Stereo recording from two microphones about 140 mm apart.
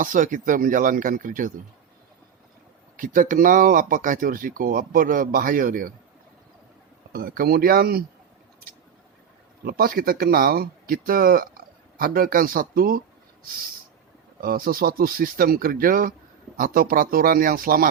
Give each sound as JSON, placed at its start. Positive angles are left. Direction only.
{"t": 0.0, "sound": "speech", "side_deg": -70}
{"t": 3.0, "sound": "speech", "side_deg": -70}
{"t": 7.1, "sound": "speech", "side_deg": -90}
{"t": 9.6, "sound": "speech", "side_deg": -90}
{"t": 14.4, "sound": "speech", "side_deg": -90}